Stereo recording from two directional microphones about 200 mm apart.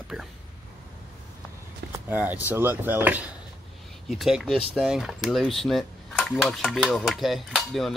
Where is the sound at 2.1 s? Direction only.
10° right (ahead or behind).